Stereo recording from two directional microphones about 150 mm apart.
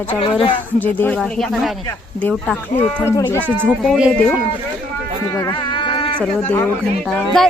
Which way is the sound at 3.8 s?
5° right (ahead or behind).